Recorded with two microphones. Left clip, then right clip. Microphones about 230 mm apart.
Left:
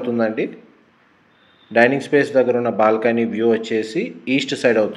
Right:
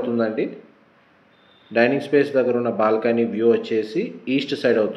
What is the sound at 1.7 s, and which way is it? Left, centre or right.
Speech, left.